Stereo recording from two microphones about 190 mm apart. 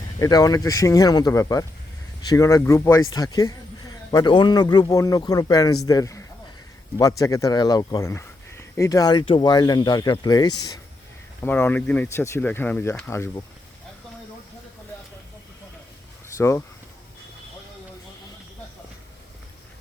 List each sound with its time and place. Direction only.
0.2 s speech: 20° left (ahead or behind)
11.4 s speech: 10° left (ahead or behind)
16.4 s speech: 15° left (ahead or behind)